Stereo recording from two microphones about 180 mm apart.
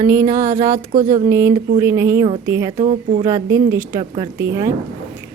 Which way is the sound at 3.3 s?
15° right (ahead or behind).